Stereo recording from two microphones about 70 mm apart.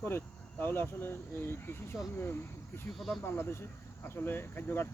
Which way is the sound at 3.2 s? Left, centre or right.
Left.